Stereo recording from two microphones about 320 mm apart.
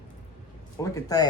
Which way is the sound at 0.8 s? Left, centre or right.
Centre.